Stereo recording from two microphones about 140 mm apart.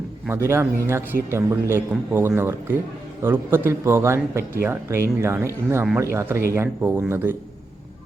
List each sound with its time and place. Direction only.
0.3 s speech: 20° right (ahead or behind)